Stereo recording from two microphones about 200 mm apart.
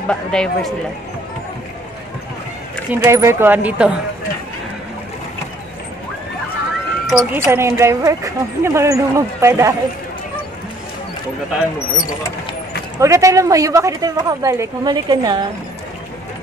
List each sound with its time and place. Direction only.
0.1 s speech: 5° left (ahead or behind)
2.9 s a woman's voice: 10° right (ahead or behind)
7.1 s a woman's voice: 5° right (ahead or behind)
13.0 s a woman's voice: 15° right (ahead or behind)